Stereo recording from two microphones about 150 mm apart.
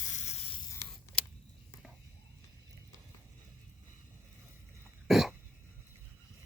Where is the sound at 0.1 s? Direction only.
50° left (ahead or behind).